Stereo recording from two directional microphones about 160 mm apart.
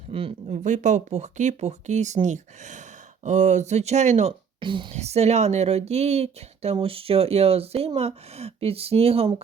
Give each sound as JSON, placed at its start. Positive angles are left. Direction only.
{"t": 0.1, "sound": "speech", "side_deg": -35}
{"t": 0.4, "sound": "speech", "side_deg": -50}
{"t": 4.6, "sound": "speech", "side_deg": -30}